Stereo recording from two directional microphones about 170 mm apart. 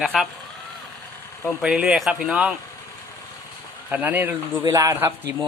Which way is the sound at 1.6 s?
5° right (ahead or behind).